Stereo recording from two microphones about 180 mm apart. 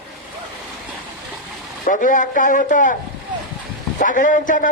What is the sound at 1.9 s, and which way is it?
Speech, 45° left (ahead or behind).